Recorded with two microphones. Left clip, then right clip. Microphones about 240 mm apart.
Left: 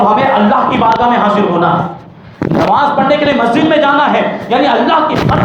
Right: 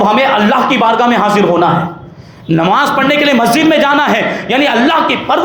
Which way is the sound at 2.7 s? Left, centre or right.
Right.